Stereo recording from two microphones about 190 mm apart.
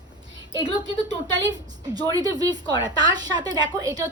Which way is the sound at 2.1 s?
20° right (ahead or behind).